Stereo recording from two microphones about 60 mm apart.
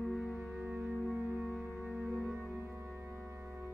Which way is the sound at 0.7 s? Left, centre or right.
Centre.